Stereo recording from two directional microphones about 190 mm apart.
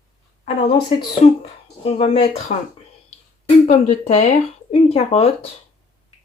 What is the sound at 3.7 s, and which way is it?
Speech, 35° left (ahead or behind).